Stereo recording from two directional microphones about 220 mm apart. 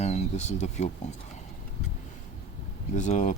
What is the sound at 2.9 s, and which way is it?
Speech, 35° left (ahead or behind).